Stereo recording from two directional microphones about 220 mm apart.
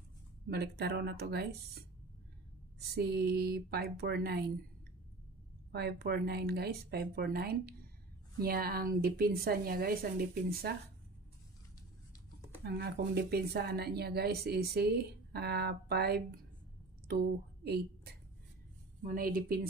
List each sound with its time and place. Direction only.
0.5 s speech: 45° right (ahead or behind)
2.9 s speech: 45° right (ahead or behind)
5.7 s speech: 45° right (ahead or behind)
12.6 s a woman's voice: 45° right (ahead or behind)